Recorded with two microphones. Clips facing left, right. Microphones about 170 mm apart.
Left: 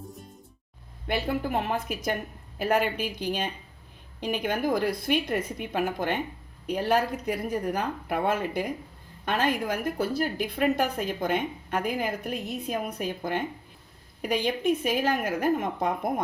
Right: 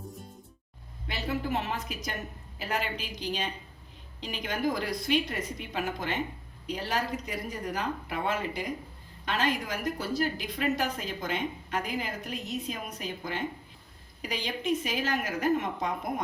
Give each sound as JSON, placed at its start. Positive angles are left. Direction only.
{"t": 1.0, "sound": "a woman's voice", "side_deg": 55}